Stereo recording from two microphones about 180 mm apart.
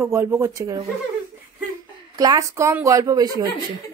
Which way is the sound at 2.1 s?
20° right (ahead or behind).